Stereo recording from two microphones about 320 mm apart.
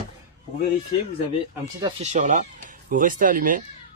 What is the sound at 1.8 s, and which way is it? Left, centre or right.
Speech, right.